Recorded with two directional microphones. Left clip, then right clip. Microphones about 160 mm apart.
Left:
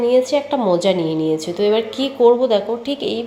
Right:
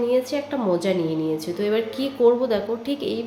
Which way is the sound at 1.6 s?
5° left (ahead or behind).